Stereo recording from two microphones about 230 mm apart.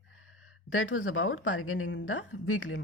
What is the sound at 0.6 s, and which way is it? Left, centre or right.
A woman's voice, left.